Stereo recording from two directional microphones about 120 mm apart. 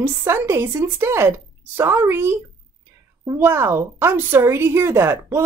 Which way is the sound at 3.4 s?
20° right (ahead or behind).